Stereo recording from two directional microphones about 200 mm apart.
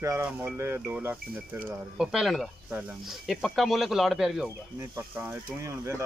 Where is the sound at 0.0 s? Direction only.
10° right (ahead or behind).